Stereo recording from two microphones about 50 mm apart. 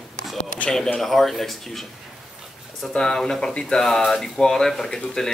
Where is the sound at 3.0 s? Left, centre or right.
Centre.